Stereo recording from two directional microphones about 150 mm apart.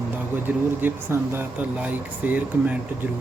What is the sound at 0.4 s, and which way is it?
Speech, 15° right (ahead or behind).